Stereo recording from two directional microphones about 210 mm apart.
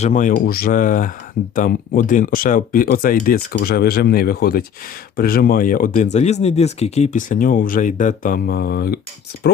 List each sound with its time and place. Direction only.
0.0 s speech: 35° left (ahead or behind)